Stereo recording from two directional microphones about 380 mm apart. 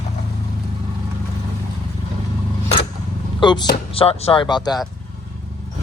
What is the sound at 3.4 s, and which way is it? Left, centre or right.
Speech, centre.